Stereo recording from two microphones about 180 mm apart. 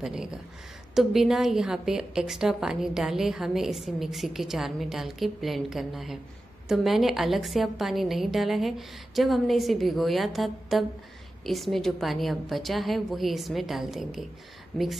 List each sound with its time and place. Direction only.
0.0 s a woman's voice: 5° right (ahead or behind)